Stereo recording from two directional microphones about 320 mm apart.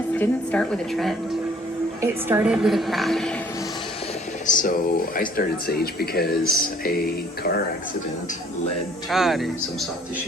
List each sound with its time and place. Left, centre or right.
0.1 s a woman's voice: centre
4.4 s speech: left
9.0 s a woman's voice: centre